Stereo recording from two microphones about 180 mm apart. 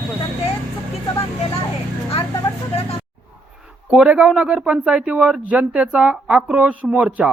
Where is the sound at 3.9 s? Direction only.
5° right (ahead or behind).